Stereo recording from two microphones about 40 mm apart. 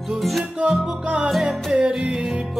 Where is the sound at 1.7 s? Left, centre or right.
Right.